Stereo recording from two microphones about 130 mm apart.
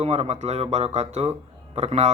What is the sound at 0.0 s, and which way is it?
A man's voice, 55° right (ahead or behind).